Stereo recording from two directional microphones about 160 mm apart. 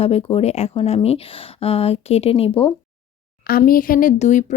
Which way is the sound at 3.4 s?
65° left (ahead or behind).